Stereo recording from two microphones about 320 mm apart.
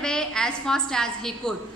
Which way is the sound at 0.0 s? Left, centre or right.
Centre.